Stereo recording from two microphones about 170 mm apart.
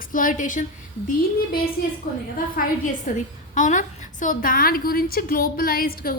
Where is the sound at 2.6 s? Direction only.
50° left (ahead or behind).